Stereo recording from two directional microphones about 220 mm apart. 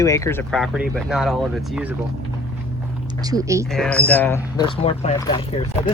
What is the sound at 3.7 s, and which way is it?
Speech, 5° left (ahead or behind).